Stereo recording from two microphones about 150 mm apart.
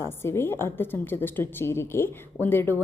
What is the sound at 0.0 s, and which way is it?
A woman's voice, 15° left (ahead or behind).